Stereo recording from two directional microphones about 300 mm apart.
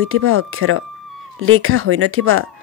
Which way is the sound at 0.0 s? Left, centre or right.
Right.